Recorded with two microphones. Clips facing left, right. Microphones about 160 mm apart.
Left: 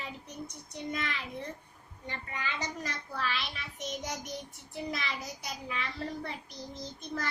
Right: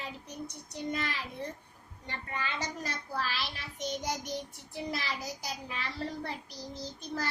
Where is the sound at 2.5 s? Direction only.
35° right (ahead or behind).